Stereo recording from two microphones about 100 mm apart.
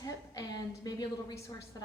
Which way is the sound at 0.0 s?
40° left (ahead or behind).